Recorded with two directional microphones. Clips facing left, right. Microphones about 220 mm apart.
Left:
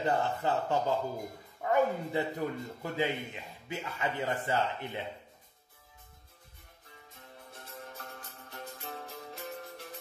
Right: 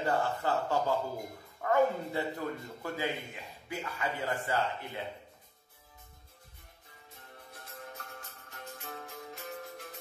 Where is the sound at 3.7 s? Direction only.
20° left (ahead or behind).